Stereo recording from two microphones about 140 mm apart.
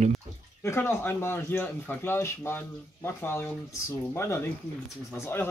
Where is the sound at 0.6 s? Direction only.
15° left (ahead or behind).